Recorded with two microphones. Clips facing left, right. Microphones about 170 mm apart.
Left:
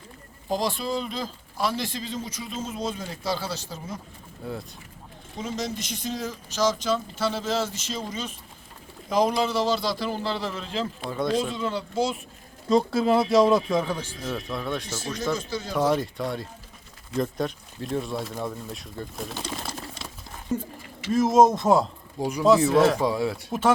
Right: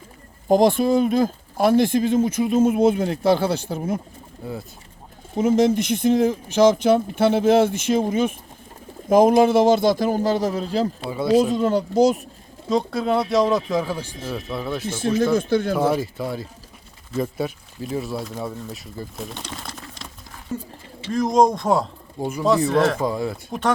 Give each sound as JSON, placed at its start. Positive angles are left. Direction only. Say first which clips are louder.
{"t": 0.4, "sound": "speech", "louder": "right 11 dB", "side_deg": -50}
{"t": 4.4, "sound": "speech", "louder": "right 2 dB", "side_deg": 0}
{"t": 5.4, "sound": "speech", "louder": "right 14 dB", "side_deg": -55}
{"t": 11.1, "sound": "speech", "louder": "right 5 dB", "side_deg": -5}
{"t": 11.3, "sound": "speech", "louder": "right 9 dB", "side_deg": -45}
{"t": 12.6, "sound": "speech", "louder": "even", "side_deg": 0}
{"t": 14.8, "sound": "speech", "louder": "right 9 dB", "side_deg": -55}
{"t": 15.9, "sound": "speech", "louder": "right 2 dB", "side_deg": -5}
{"t": 21.1, "sound": "speech", "louder": "even", "side_deg": 5}